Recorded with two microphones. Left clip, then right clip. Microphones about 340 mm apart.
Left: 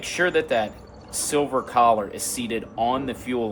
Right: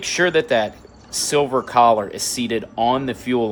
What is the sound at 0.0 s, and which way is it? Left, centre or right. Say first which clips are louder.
Speech: right 4 dB; right.